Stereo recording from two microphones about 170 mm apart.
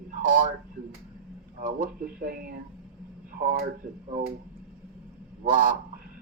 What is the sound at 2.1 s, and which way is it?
Speech, 60° right (ahead or behind).